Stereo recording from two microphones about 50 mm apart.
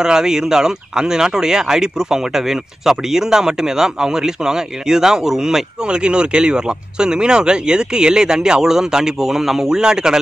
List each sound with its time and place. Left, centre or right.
0.0 s speech: centre